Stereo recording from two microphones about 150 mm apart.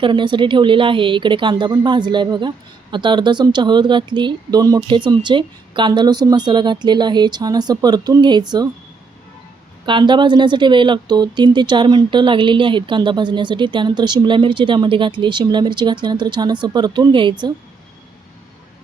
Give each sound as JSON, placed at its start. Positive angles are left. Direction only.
{"t": 0.0, "sound": "speech", "side_deg": -30}
{"t": 9.8, "sound": "speech", "side_deg": -30}